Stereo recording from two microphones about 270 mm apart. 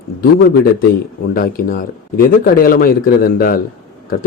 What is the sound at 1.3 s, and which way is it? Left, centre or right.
A man's voice, left.